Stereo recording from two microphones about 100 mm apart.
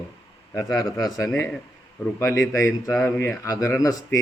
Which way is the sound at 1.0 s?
40° left (ahead or behind).